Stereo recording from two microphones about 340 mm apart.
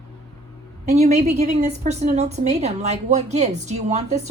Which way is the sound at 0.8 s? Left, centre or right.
Centre.